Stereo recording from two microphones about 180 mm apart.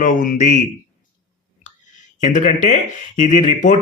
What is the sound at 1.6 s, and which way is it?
Speech, 45° left (ahead or behind).